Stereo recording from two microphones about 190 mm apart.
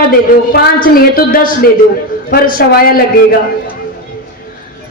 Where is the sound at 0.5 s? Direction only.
50° left (ahead or behind).